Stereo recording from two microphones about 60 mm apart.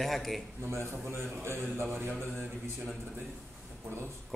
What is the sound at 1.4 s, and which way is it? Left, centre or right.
Speech, right.